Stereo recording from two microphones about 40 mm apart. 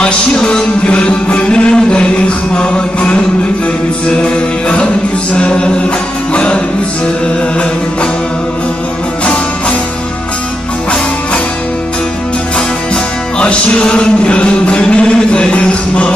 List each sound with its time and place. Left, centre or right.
0.0 s music: left
9.2 s music: left
12.5 s music: left